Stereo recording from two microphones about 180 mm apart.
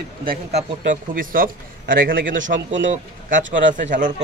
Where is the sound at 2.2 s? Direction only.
90° right.